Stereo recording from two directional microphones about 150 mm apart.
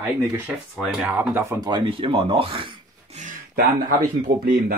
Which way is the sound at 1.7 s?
35° right (ahead or behind).